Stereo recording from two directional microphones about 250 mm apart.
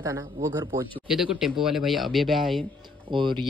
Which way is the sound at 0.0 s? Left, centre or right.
Centre.